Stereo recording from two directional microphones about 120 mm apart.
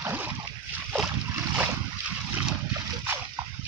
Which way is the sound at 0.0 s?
15° right (ahead or behind).